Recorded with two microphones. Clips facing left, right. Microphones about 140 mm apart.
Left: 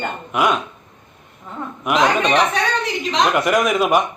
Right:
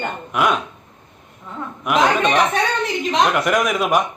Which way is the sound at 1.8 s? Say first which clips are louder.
Even; centre (ahead or behind).